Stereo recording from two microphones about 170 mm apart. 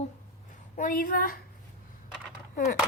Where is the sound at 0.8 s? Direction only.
55° left (ahead or behind).